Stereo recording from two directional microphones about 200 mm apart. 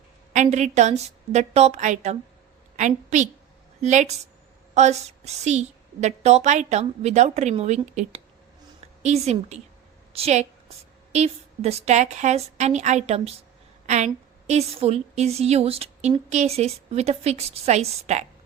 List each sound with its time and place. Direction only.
0.3 s a woman's voice: 35° right (ahead or behind)